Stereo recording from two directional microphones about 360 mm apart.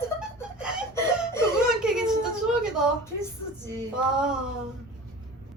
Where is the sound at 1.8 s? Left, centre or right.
Centre.